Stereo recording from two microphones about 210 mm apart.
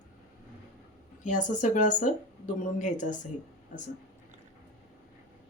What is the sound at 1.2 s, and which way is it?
Speech, 35° left (ahead or behind).